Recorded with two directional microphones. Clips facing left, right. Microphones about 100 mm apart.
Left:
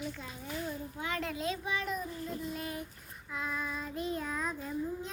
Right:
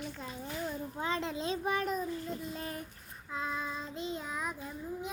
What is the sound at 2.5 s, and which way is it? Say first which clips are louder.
Child singing: left 1 dB; 35° right (ahead or behind).